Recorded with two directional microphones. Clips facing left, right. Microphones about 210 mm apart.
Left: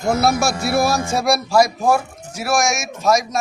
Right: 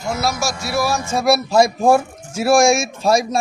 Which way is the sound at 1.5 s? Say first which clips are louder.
Right 2 dB; 25° right (ahead or behind).